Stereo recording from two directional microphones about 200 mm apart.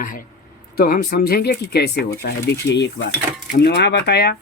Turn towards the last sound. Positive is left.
turn(degrees=55)  # may be behind; listen again after turning